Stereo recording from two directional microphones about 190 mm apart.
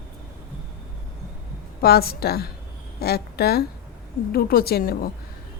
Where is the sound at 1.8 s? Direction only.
55° left (ahead or behind).